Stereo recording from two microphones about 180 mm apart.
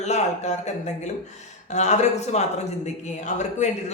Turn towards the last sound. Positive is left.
turn(degrees=40)  # may be behind; listen again after turning